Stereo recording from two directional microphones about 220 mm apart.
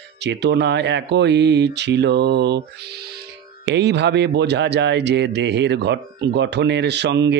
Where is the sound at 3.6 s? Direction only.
50° right (ahead or behind).